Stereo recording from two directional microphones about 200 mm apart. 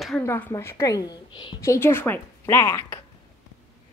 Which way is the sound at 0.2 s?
10° left (ahead or behind).